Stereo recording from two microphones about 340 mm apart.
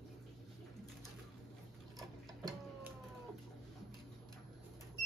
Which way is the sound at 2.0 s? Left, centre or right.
Centre.